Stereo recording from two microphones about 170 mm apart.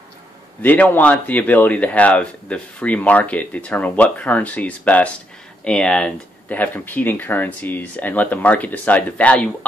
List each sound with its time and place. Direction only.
0.6 s speech: 10° left (ahead or behind)